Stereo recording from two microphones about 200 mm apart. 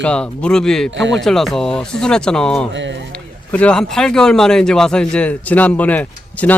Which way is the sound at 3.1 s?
5° left (ahead or behind).